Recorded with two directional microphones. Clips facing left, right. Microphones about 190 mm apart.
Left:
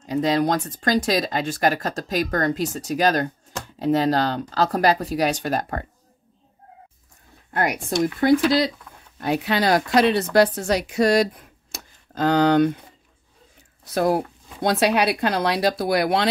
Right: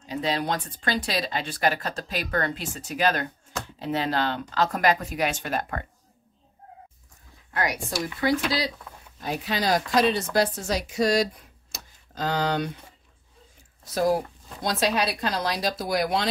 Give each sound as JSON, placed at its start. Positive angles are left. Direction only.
{"t": 0.0, "sound": "speech", "side_deg": 45}
{"t": 7.5, "sound": "speech", "side_deg": 55}
{"t": 9.2, "sound": "speech", "side_deg": 65}
{"t": 13.9, "sound": "speech", "side_deg": 60}